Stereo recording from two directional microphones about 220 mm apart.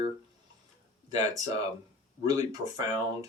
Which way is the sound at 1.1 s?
15° right (ahead or behind).